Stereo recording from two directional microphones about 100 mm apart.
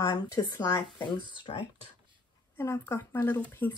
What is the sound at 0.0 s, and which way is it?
Speech, 45° left (ahead or behind).